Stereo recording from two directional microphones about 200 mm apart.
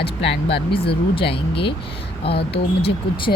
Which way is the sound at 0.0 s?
60° left (ahead or behind).